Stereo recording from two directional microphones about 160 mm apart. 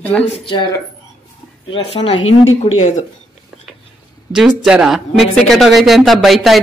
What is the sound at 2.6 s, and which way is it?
Speech, 45° left (ahead or behind).